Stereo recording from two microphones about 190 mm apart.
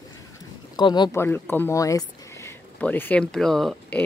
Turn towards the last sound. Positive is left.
turn(degrees=0)  # may be behind; listen again after turning